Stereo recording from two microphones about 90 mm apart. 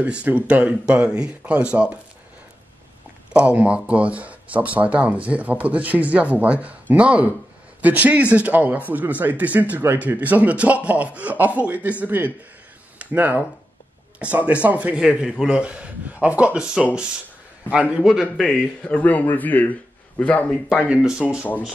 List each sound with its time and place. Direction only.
0.0 s speech: 15° right (ahead or behind)
3.3 s speech: 15° right (ahead or behind)
18.2 s a man's voice: 10° left (ahead or behind)
20.9 s speech: 10° right (ahead or behind)
21.4 s a man's voice: 20° left (ahead or behind)